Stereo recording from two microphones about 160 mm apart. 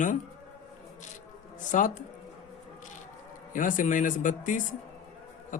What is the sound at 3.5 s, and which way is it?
A man's voice, 55° left (ahead or behind).